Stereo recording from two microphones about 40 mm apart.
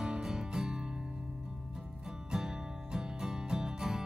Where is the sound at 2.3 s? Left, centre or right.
Centre.